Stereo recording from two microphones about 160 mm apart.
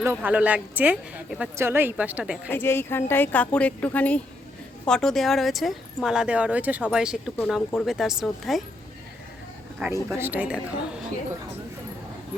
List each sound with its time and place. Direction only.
0.0 s speech: 10° right (ahead or behind)
2.5 s speech: 15° left (ahead or behind)
9.8 s speech: 10° right (ahead or behind)